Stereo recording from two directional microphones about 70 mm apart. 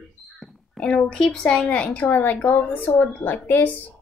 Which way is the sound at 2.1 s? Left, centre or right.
Left.